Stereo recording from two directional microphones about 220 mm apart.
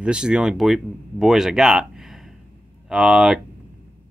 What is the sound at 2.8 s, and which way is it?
Speech, 5° right (ahead or behind).